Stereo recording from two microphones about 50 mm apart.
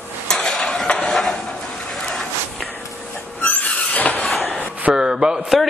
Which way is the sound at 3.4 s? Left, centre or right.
Left.